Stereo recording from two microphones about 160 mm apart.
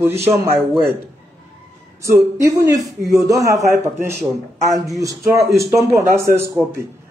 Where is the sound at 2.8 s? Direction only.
Centre (ahead or behind).